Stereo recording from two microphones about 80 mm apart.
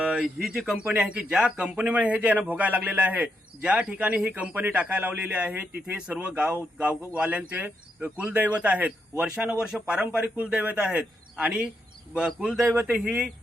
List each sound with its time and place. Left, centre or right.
0.0 s a man's voice: centre
1.0 s a man's voice: centre
12.6 s speech: right
12.9 s a man's voice: centre